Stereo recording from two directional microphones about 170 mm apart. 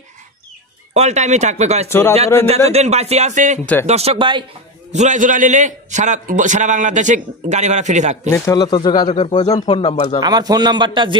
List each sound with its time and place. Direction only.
0.9 s speech: 40° right (ahead or behind)
1.9 s speech: 15° left (ahead or behind)
2.7 s speech: 40° right (ahead or behind)
4.9 s a man's voice: 45° right (ahead or behind)
8.3 s speech: 20° left (ahead or behind)
9.7 s speech: 35° left (ahead or behind)
10.2 s a man's voice: 25° right (ahead or behind)